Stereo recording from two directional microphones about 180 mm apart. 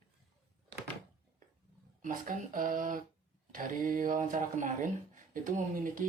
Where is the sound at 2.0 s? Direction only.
50° right (ahead or behind).